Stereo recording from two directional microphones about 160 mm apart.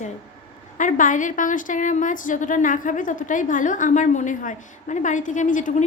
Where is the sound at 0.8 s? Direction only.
55° left (ahead or behind).